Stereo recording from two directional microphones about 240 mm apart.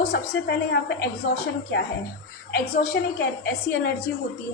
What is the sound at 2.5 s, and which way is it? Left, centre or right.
A woman's voice, left.